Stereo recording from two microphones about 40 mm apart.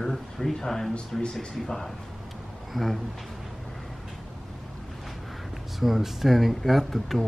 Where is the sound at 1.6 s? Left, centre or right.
Centre.